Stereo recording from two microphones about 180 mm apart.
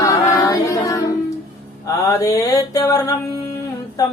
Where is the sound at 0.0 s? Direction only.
15° left (ahead or behind).